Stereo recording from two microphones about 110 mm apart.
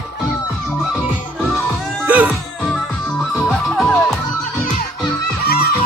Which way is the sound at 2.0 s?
15° right (ahead or behind).